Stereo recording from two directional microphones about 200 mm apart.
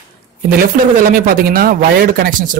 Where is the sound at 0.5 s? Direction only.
45° right (ahead or behind).